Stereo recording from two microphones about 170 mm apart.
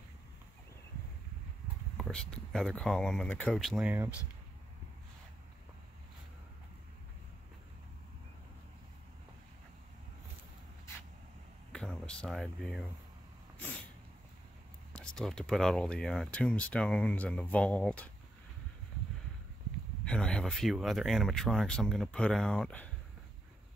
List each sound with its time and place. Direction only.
2.0 s speech: 5° left (ahead or behind)
11.7 s a sound: 5° left (ahead or behind)
14.9 s speech: 5° left (ahead or behind)
20.1 s speech: 5° left (ahead or behind)